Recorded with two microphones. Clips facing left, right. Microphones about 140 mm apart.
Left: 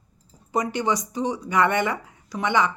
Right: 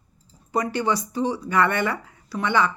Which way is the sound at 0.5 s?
20° left (ahead or behind).